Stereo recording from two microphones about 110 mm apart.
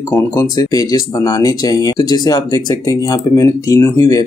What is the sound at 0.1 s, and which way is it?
Speech, 30° left (ahead or behind).